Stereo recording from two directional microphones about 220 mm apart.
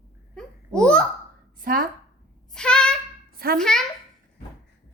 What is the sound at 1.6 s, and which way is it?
Speech, 40° right (ahead or behind).